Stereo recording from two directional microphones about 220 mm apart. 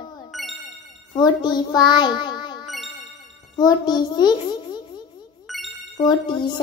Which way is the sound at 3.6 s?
20° left (ahead or behind).